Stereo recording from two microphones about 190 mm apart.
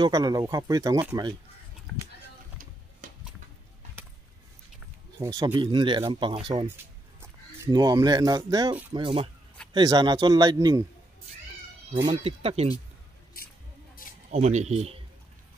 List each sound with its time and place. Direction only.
0.0 s speech: 20° right (ahead or behind)
1.9 s speech: centre (ahead or behind)
5.2 s speech: 20° right (ahead or behind)
6.8 s speech: 15° right (ahead or behind)
11.9 s speech: 25° right (ahead or behind)
14.3 s speech: 35° right (ahead or behind)